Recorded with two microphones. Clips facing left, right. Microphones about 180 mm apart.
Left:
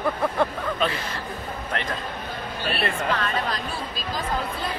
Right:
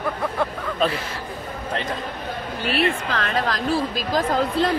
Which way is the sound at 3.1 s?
90° right.